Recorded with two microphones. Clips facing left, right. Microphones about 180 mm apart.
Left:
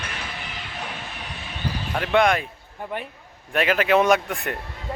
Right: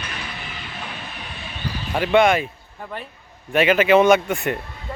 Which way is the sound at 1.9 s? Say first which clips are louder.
Right 4 dB; centre (ahead or behind).